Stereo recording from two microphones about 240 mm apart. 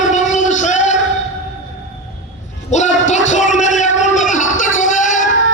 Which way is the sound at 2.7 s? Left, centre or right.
Left.